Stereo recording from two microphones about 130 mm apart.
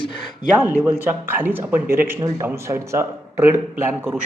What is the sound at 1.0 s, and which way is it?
Speech, 15° right (ahead or behind).